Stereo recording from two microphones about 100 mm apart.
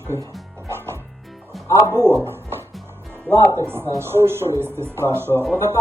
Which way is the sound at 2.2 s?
25° right (ahead or behind).